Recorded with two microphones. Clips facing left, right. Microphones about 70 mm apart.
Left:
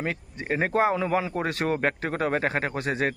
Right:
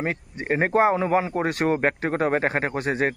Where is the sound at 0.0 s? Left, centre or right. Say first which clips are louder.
Right 3 dB; right.